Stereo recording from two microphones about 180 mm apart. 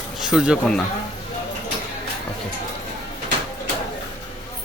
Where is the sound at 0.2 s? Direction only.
5° right (ahead or behind).